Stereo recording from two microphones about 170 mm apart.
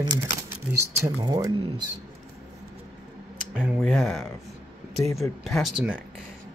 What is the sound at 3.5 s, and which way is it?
Speech, 10° right (ahead or behind).